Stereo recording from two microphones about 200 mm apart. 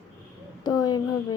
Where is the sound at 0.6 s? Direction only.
20° left (ahead or behind).